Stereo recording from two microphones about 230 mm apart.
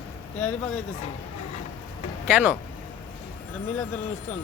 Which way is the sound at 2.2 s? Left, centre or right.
Centre.